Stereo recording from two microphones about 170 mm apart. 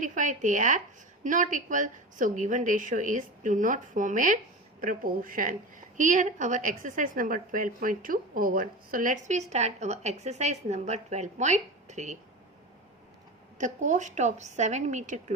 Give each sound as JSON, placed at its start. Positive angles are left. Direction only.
{"t": 0.0, "sound": "a woman's voice", "side_deg": -50}
{"t": 13.6, "sound": "a woman's voice", "side_deg": -45}